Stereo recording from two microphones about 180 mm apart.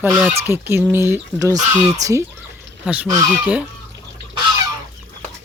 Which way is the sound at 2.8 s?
10° right (ahead or behind).